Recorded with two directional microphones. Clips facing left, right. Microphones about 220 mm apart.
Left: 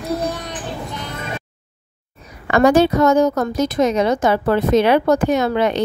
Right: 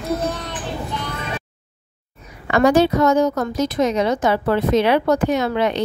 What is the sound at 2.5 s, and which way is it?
A woman's voice, 50° left (ahead or behind).